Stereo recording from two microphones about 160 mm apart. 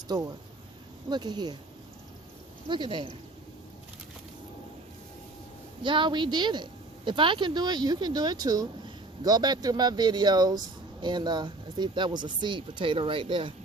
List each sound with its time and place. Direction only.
0.1 s a woman's voice: 25° right (ahead or behind)
2.6 s a woman's voice: 30° right (ahead or behind)
5.8 s a woman's voice: 30° right (ahead or behind)